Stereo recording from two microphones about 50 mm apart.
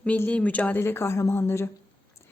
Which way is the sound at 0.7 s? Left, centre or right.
Left.